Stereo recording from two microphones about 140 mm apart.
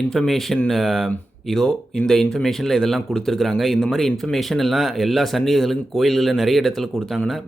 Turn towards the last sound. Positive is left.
turn(degrees=0)  # may be behind; listen again after turning